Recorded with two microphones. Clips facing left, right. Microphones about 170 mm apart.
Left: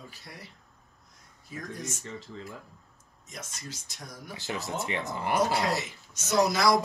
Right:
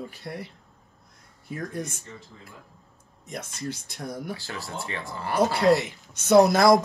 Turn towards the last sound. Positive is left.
turn(degrees=-50)  # may be behind; listen again after turning